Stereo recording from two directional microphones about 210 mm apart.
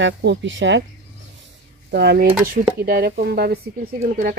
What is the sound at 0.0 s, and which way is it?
Speech, 55° right (ahead or behind).